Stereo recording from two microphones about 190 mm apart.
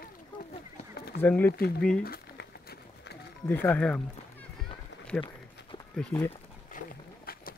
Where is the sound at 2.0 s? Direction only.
55° left (ahead or behind).